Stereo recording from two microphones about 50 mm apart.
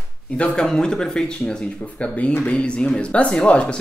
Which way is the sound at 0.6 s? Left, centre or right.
Centre.